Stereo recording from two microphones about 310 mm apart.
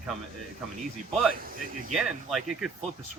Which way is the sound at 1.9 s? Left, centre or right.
Centre.